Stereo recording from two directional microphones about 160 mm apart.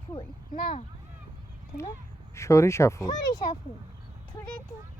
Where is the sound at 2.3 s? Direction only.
20° left (ahead or behind).